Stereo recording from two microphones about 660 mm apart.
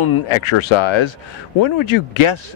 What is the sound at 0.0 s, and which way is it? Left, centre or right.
Speech, left.